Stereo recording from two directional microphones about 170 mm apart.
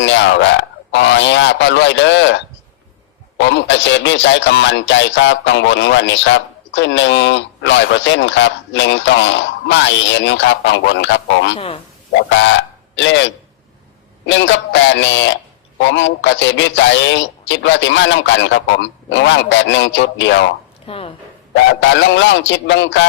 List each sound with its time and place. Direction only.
0.0 s a man's voice: 90° left
11.5 s a man's voice: 35° left (ahead or behind)
13.0 s a man's voice: 90° left
20.8 s a woman's voice: 35° left (ahead or behind)
21.5 s a man's voice: 90° left